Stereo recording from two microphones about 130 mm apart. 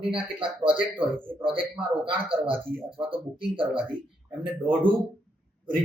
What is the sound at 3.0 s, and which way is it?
Speech, 40° right (ahead or behind).